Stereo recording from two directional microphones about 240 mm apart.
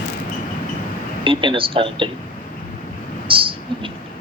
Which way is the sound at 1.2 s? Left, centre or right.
Right.